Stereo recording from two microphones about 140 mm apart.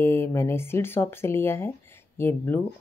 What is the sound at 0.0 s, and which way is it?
Speech, 20° left (ahead or behind).